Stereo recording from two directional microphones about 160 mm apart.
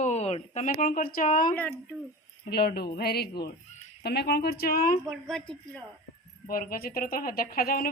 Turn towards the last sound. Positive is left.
turn(degrees=65)  # may be behind; listen again after turning